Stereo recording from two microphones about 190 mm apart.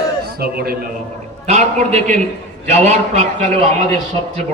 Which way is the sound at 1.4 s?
35° right (ahead or behind).